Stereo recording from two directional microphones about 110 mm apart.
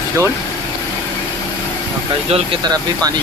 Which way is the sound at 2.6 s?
40° right (ahead or behind).